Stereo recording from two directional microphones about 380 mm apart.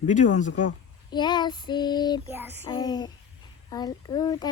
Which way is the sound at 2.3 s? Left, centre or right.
Centre.